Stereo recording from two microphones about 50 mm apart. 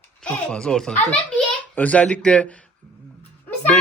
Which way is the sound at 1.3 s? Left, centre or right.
Left.